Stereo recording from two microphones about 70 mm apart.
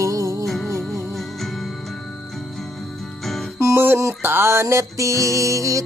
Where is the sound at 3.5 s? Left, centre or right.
Right.